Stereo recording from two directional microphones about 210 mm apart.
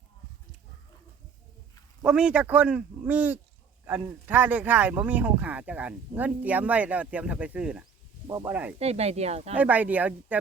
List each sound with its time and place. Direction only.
2.0 s speech: 5° right (ahead or behind)
8.3 s speech: 20° right (ahead or behind)
8.8 s speech: 30° right (ahead or behind)
9.6 s speech: 5° right (ahead or behind)